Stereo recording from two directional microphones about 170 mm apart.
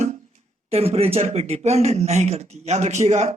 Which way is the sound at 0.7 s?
35° right (ahead or behind).